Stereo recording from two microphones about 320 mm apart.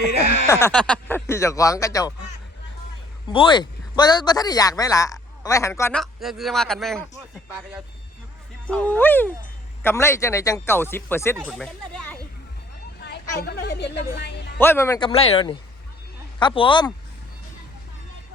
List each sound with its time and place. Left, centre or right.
0.4 s speech: centre
3.3 s speech: centre
8.7 s speech: centre
13.0 s speech: left
14.6 s speech: centre